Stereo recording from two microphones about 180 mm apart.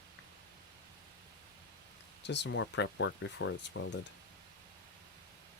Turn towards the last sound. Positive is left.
turn(degrees=90)